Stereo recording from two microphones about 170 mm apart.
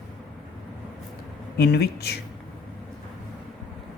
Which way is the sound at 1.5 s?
70° left (ahead or behind).